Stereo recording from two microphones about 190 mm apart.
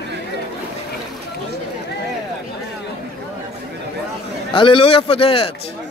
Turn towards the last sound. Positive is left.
turn(degrees=30)  # may be behind; listen again after turning